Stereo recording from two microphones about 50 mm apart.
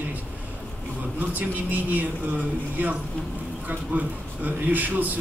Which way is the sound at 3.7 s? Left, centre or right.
Right.